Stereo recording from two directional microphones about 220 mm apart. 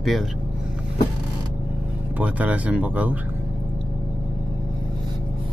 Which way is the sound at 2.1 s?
5° right (ahead or behind).